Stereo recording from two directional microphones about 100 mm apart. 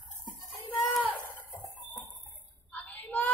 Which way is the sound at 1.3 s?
20° left (ahead or behind).